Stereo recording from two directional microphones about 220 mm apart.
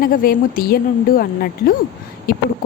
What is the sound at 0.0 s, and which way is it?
A woman's voice, 40° left (ahead or behind).